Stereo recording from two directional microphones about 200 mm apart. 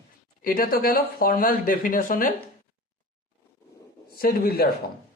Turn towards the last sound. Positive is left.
turn(degrees=50)  # may be behind; listen again after turning